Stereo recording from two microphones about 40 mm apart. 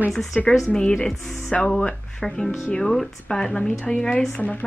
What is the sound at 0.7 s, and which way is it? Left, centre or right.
Speech, centre.